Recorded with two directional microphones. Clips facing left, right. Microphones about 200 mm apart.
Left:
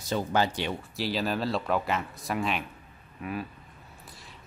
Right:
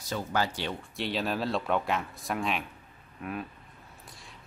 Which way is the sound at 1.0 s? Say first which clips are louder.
Left 1 dB; centre (ahead or behind).